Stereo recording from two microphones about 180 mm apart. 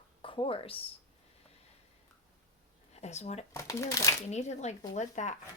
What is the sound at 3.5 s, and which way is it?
Speech, 15° left (ahead or behind).